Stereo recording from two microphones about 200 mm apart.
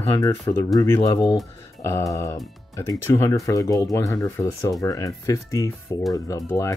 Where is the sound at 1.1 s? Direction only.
Centre (ahead or behind).